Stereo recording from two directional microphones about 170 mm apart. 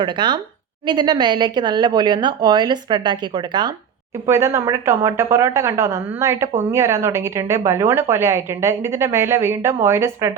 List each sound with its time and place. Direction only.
0.0 s a woman's voice: 25° right (ahead or behind)